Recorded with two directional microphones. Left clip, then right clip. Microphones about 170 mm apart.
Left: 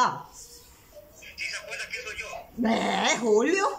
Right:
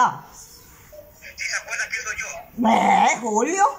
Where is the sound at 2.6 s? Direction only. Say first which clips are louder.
Right 10 dB; 10° right (ahead or behind).